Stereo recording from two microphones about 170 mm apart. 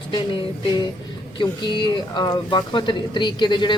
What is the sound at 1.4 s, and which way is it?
Speech, 25° left (ahead or behind).